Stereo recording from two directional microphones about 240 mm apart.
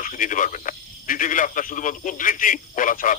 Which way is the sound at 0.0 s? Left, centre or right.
Left.